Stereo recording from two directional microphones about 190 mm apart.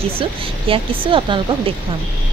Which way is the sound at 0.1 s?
30° right (ahead or behind).